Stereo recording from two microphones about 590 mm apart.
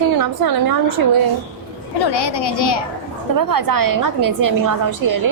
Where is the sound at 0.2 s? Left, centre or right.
Right.